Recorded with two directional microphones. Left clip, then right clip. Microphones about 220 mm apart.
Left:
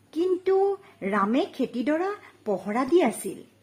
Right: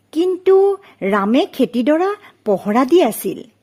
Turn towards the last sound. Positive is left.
turn(degrees=-45)  # may be behind; listen again after turning